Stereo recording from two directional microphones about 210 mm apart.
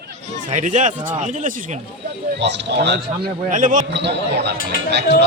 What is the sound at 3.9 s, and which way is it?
Speech, 55° right (ahead or behind).